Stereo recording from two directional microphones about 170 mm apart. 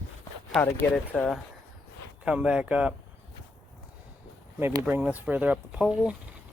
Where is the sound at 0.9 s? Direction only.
Centre (ahead or behind).